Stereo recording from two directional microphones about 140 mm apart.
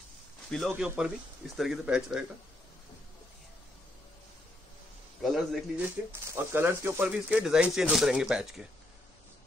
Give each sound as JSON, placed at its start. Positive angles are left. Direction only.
{"t": 0.7, "sound": "speech", "side_deg": -10}
{"t": 5.2, "sound": "speech", "side_deg": 0}
{"t": 6.3, "sound": "speech", "side_deg": -15}